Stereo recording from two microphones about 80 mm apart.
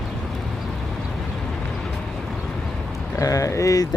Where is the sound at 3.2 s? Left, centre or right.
Left.